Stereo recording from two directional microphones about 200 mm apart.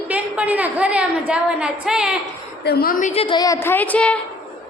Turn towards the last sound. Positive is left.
turn(degrees=5)  # may be behind; listen again after turning